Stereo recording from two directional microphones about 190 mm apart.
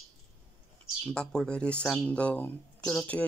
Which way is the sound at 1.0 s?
5° left (ahead or behind).